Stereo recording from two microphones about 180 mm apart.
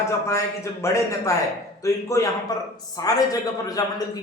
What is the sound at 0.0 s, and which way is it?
A man's voice, 15° left (ahead or behind).